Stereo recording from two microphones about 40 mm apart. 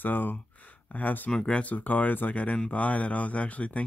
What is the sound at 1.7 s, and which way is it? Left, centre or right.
Speech, left.